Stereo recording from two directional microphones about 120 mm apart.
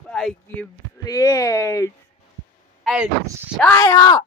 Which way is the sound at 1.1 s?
30° left (ahead or behind).